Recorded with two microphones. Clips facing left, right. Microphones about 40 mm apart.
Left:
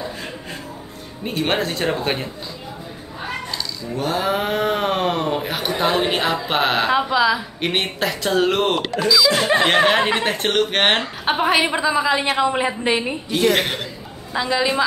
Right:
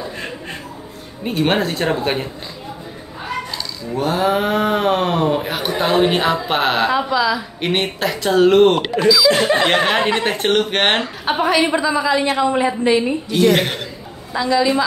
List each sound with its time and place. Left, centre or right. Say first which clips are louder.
1.2 s speech: right 4 dB; centre
3.9 s speech: right 4 dB; centre
6.9 s a woman's voice: even; centre
7.6 s speech: right 3 dB; centre
11.2 s a woman's voice: right 1 dB; centre
13.3 s speech: right 2 dB; centre
14.3 s a woman's voice: right 4 dB; centre